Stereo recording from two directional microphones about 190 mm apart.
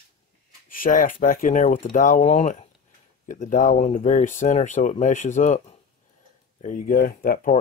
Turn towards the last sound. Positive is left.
turn(degrees=45)  # may be behind; listen again after turning